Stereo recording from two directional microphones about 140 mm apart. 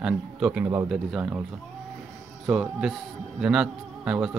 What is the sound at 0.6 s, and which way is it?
Speech, 15° right (ahead or behind).